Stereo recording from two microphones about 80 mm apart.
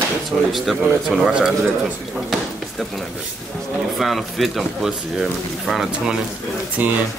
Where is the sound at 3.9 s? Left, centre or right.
Centre.